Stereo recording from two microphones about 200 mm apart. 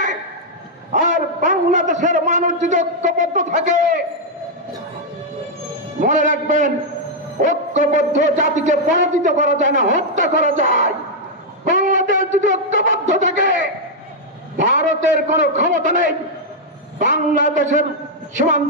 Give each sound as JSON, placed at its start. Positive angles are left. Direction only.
{"t": 0.9, "sound": "a man's voice", "side_deg": -35}
{"t": 5.9, "sound": "music", "side_deg": -40}
{"t": 7.4, "sound": "a man's voice", "side_deg": -35}
{"t": 11.6, "sound": "wind instrument", "side_deg": -40}
{"t": 14.6, "sound": "a man's voice", "side_deg": -35}